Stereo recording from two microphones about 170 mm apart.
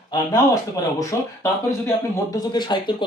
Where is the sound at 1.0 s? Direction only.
20° left (ahead or behind).